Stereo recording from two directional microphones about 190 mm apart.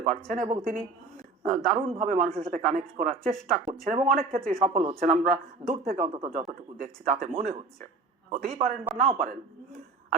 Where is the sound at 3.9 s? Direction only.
30° right (ahead or behind).